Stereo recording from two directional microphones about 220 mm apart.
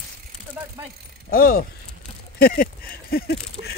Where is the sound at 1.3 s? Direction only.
40° left (ahead or behind).